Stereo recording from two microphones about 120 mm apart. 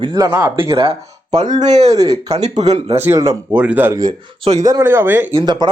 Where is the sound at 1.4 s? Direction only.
80° right; by 3.0 s 60° right (ahead or behind).